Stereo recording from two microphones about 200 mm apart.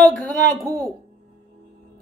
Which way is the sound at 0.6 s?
15° right (ahead or behind).